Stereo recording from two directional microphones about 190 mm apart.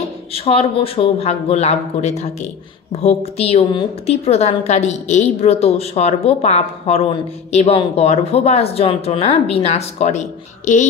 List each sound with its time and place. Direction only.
0.3 s a woman's voice: 30° left (ahead or behind)